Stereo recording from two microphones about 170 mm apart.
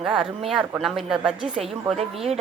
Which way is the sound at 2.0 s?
35° right (ahead or behind).